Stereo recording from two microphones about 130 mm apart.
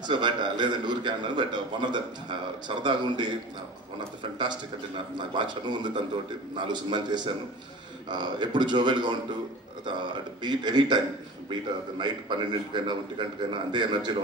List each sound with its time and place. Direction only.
0.0 s a man's voice: 35° right (ahead or behind)
12.0 s a man's voice: 35° right (ahead or behind)